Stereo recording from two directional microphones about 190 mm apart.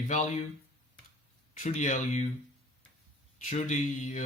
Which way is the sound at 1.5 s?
40° left (ahead or behind).